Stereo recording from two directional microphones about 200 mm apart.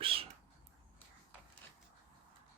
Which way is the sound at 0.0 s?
25° right (ahead or behind).